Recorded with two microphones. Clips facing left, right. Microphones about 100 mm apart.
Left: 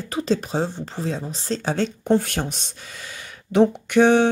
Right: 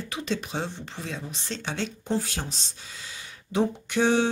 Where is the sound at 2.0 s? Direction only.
60° left (ahead or behind).